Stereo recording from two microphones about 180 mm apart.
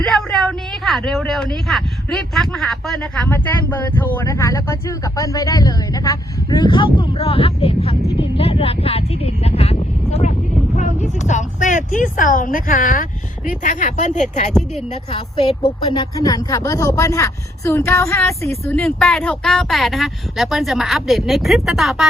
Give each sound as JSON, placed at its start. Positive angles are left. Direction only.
{"t": 0.0, "sound": "speech", "side_deg": 5}
{"t": 15.1, "sound": "speech", "side_deg": 30}
{"t": 18.7, "sound": "speech", "side_deg": 5}